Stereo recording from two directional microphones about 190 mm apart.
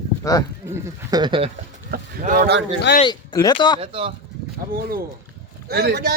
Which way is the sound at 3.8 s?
30° right (ahead or behind).